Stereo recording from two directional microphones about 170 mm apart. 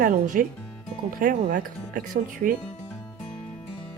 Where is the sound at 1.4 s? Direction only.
50° right (ahead or behind).